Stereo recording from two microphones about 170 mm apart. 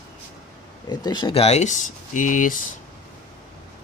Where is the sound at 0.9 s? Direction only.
25° left (ahead or behind); by 2.5 s 50° left (ahead or behind).